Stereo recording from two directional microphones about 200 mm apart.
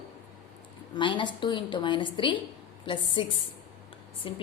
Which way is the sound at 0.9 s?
25° left (ahead or behind).